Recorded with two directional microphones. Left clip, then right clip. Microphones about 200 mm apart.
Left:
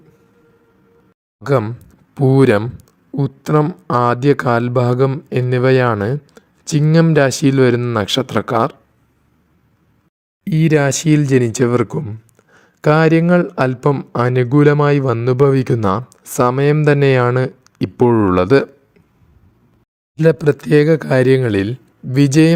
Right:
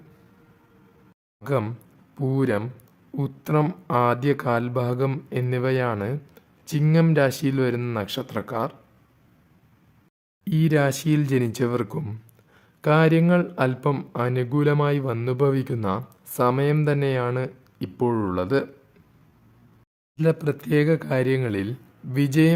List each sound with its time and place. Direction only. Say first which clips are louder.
1.5 s speech: left 9 dB; 30° left (ahead or behind)
10.4 s speech: left 7 dB; 25° left (ahead or behind)
20.1 s speech: left 10 dB; 30° left (ahead or behind)